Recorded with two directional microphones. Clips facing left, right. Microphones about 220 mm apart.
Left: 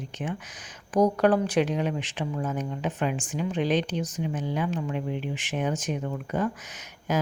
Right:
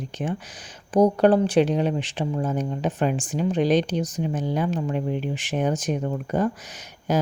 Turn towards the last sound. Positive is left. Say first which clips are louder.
# right 4 dB
turn(degrees=-30)  # may be behind; listen again after turning